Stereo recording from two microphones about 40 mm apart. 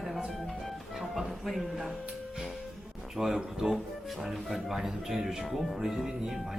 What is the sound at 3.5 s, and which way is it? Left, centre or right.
Music, centre.